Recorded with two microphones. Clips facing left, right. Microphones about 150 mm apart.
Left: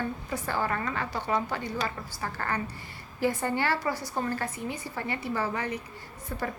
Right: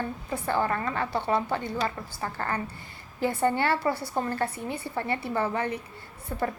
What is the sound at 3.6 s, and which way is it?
A woman's voice, 25° right (ahead or behind).